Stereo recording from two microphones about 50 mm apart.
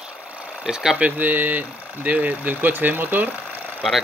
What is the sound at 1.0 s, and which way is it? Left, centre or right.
Speech, right.